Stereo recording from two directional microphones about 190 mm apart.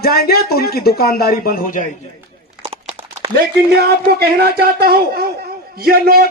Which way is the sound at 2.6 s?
30° right (ahead or behind).